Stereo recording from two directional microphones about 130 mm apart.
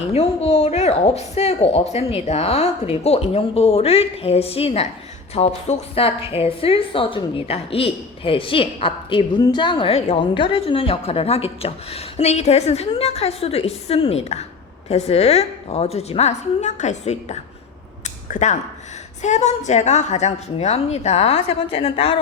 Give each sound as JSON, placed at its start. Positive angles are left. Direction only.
{"t": 0.1, "sound": "a woman's voice", "side_deg": 55}